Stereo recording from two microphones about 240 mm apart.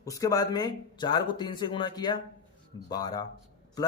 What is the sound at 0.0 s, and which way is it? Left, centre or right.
A man's voice, centre.